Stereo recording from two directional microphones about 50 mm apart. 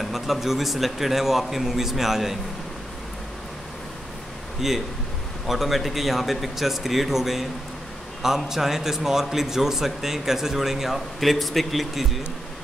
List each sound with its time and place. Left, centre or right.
0.0 s a man's voice: centre
4.6 s a man's voice: centre